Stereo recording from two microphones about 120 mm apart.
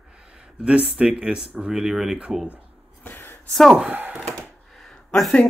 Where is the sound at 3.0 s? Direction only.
20° left (ahead or behind).